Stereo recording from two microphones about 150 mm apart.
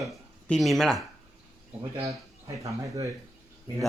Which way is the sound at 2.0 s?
20° right (ahead or behind).